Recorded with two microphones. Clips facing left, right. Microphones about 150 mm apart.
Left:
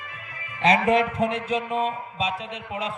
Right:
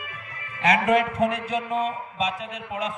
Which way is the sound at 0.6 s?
25° left (ahead or behind).